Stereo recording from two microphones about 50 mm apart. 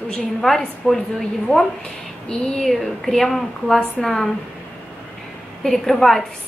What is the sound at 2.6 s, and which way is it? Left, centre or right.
A woman's voice, centre.